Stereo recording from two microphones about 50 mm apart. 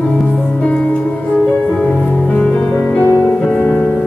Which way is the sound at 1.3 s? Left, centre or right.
Centre.